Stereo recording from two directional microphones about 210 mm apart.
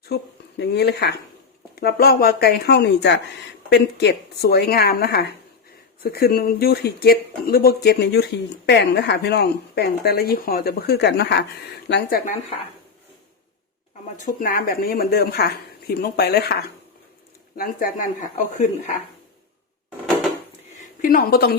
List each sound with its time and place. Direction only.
0.0 s speech: 50° left (ahead or behind)
14.3 s speech: 40° left (ahead or behind)
17.6 s speech: 40° left (ahead or behind)
21.0 s speech: 40° left (ahead or behind)